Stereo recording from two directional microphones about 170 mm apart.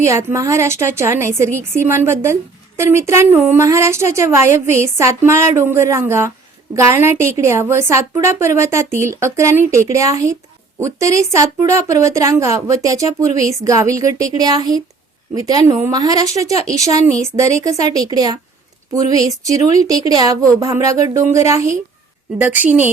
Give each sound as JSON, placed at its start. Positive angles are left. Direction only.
{"t": 0.0, "sound": "a woman's voice", "side_deg": -15}